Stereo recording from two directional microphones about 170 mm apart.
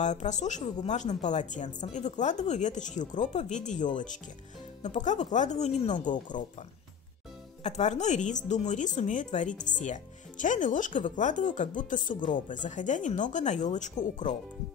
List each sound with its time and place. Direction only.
0.0 s speech: 45° left (ahead or behind)
7.6 s speech: 40° left (ahead or behind)